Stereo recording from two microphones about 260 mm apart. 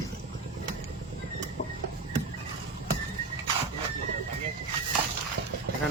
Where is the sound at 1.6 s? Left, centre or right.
Left.